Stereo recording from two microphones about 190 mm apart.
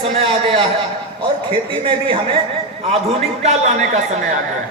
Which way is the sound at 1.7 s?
25° right (ahead or behind).